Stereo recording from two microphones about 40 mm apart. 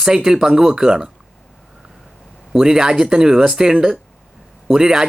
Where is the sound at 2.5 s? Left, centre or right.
Centre.